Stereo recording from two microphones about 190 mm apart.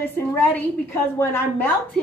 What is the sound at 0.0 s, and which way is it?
A woman's voice, 10° left (ahead or behind).